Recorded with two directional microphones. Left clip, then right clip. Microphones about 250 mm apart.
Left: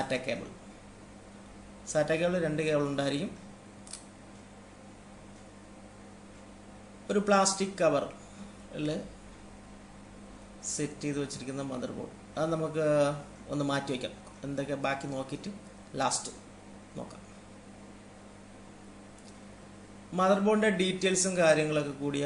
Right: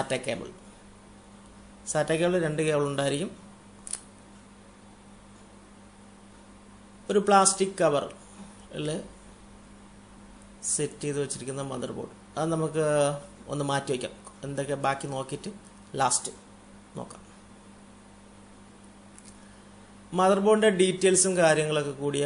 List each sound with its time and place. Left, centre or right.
0.1 s a man's voice: right
1.9 s a man's voice: right
7.1 s a man's voice: right
10.6 s a man's voice: right
20.1 s a man's voice: right